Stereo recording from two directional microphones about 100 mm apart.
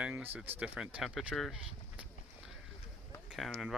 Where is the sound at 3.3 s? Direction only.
Centre (ahead or behind).